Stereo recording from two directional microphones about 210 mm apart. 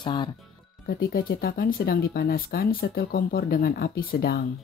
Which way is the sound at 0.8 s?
45° left (ahead or behind).